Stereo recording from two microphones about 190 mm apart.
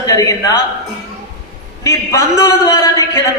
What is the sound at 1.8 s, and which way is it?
A man's voice, 15° left (ahead or behind).